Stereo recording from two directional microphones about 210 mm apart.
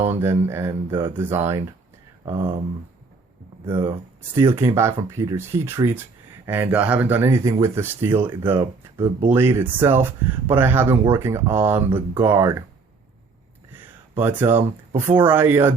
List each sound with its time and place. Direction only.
0.0 s speech: 10° right (ahead or behind)
3.8 s speech: 15° right (ahead or behind)
14.2 s speech: 10° right (ahead or behind)